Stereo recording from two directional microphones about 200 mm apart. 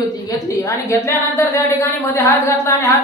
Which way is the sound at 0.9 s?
15° left (ahead or behind).